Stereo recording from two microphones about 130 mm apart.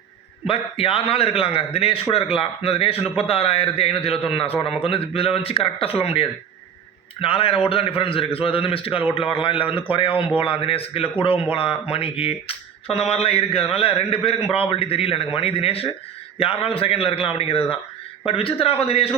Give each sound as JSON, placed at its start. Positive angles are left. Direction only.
{"t": 0.4, "sound": "speech", "side_deg": 45}